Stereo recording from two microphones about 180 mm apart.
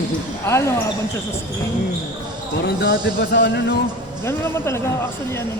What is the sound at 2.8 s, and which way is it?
Music, 70° left (ahead or behind).